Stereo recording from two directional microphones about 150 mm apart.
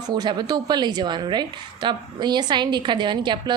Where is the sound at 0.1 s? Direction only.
30° right (ahead or behind).